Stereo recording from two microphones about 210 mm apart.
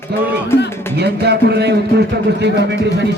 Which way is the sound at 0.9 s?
50° right (ahead or behind).